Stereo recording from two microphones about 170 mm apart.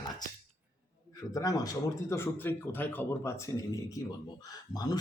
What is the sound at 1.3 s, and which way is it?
A man's voice, 20° left (ahead or behind).